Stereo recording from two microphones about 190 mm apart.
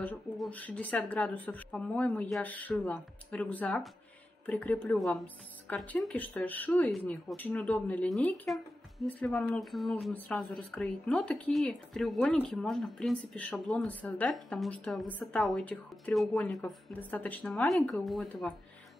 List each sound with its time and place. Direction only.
0.0 s speech: 10° left (ahead or behind)